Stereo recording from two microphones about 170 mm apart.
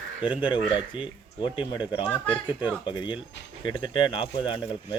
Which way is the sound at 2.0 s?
10° left (ahead or behind).